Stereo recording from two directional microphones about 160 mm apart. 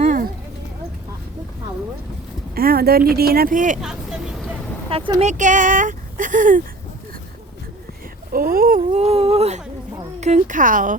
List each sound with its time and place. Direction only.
0.0 s clip-clop: 60° right (ahead or behind)
2.6 s speech: 70° right (ahead or behind); by 3.8 s 55° right (ahead or behind)
3.8 s vehicle: 5° right (ahead or behind)
4.9 s speech: 35° right (ahead or behind)
5.2 s speech: 50° right (ahead or behind)
8.3 s a woman's voice: 65° right (ahead or behind)
8.9 s a woman's voice: 40° right (ahead or behind)